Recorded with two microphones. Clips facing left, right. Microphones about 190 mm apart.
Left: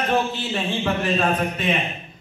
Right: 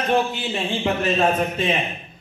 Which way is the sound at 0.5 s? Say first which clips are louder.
Even; 20° right (ahead or behind).